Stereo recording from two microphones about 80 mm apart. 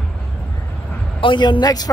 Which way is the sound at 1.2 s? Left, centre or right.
Left.